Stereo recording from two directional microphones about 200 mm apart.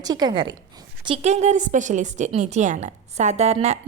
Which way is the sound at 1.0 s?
30° right (ahead or behind).